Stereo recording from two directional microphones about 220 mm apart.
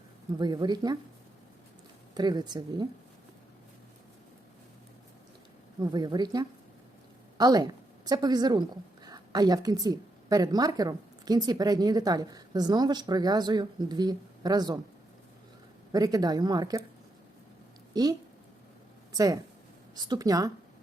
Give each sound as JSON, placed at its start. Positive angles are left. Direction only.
{"t": 0.3, "sound": "speech", "side_deg": -20}
{"t": 2.1, "sound": "a woman's voice", "side_deg": -20}
{"t": 5.8, "sound": "a woman's voice", "side_deg": -15}
{"t": 15.9, "sound": "speech", "side_deg": -15}
{"t": 17.9, "sound": "speech", "side_deg": -15}